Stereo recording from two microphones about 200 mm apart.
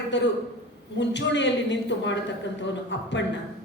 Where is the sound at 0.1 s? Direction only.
65° left (ahead or behind).